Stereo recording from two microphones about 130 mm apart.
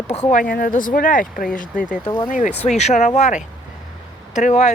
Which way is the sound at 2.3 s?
70° left (ahead or behind).